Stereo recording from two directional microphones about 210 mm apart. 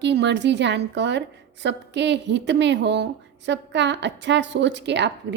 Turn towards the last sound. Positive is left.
turn(degrees=-55)  # may be behind; listen again after turning